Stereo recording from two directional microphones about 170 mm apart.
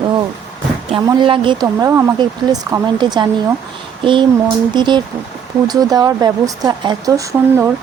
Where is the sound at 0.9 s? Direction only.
30° right (ahead or behind).